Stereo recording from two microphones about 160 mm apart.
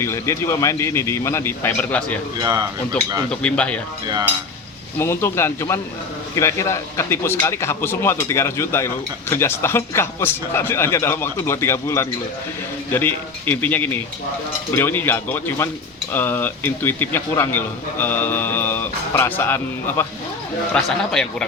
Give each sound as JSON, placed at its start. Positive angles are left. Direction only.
{"t": 0.0, "sound": "a man's voice", "side_deg": 15}
{"t": 2.4, "sound": "speech", "side_deg": -20}
{"t": 3.2, "sound": "a man's voice", "side_deg": 5}
{"t": 4.9, "sound": "a man's voice", "side_deg": 15}